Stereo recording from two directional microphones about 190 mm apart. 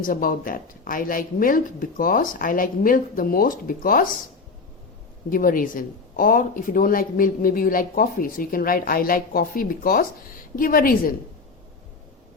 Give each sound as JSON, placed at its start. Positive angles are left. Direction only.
{"t": 0.0, "sound": "speech", "side_deg": 45}
{"t": 5.3, "sound": "speech", "side_deg": 45}